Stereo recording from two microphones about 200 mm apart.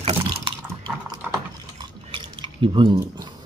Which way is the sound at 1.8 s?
25° right (ahead or behind).